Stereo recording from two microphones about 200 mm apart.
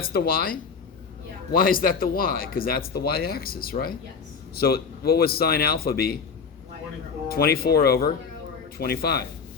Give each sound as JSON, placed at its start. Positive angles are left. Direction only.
{"t": 0.0, "sound": "speech", "side_deg": 50}
{"t": 7.3, "sound": "speech", "side_deg": 50}